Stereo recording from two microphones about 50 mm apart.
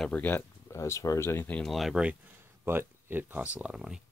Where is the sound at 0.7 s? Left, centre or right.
Left.